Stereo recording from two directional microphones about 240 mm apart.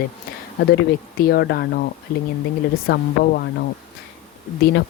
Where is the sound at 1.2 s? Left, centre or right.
Left.